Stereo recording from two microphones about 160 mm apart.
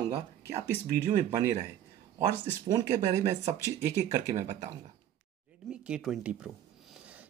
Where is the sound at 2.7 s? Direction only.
30° right (ahead or behind).